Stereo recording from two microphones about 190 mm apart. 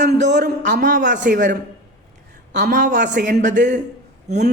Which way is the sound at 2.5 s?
60° right (ahead or behind).